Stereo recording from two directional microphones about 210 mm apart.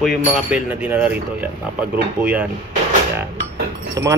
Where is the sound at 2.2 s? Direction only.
5° right (ahead or behind).